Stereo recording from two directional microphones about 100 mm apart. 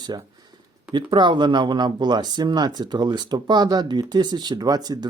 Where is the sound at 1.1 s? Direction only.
50° right (ahead or behind).